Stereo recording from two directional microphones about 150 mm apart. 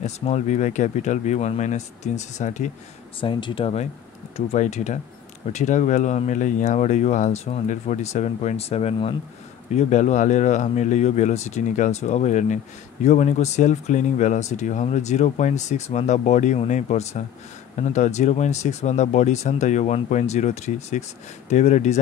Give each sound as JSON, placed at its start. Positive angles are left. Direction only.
{"t": 0.0, "sound": "speech", "side_deg": 50}
{"t": 3.2, "sound": "speech", "side_deg": 35}
{"t": 4.5, "sound": "speech", "side_deg": 50}